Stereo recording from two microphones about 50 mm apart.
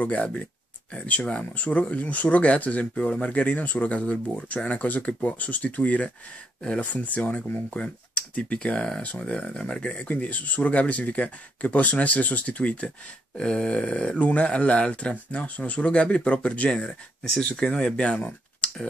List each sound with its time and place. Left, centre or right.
0.0 s speech: left
1.6 s speech: left
10.0 s speech: left
13.4 s speech: centre